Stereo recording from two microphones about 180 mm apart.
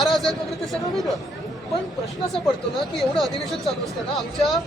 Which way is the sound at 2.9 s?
Centre (ahead or behind).